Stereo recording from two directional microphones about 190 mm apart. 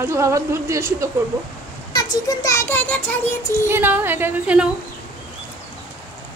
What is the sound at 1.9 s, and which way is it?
Speech, 20° left (ahead or behind).